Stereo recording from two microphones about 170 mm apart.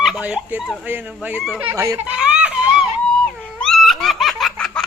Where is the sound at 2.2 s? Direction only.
5° right (ahead or behind).